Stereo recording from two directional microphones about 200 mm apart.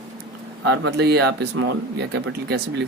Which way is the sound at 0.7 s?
55° right (ahead or behind).